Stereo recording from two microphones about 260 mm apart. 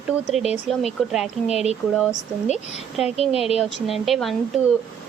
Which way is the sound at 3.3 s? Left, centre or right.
Left.